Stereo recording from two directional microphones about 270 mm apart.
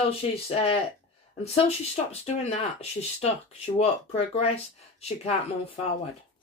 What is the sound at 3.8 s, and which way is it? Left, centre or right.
Speech, left.